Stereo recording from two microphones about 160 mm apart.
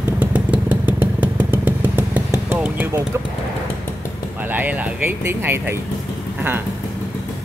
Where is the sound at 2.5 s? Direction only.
10° right (ahead or behind).